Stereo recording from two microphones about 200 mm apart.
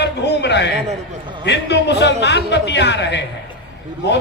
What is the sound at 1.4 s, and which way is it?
A man's voice, 60° left (ahead or behind).